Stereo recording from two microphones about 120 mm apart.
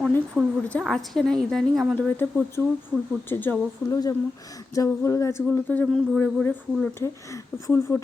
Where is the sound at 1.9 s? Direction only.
15° left (ahead or behind).